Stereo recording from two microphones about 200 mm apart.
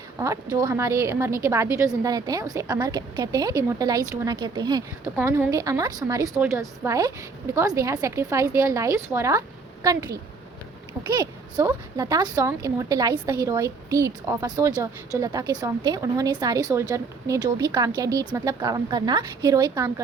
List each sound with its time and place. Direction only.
0.5 s a woman's voice: 15° right (ahead or behind)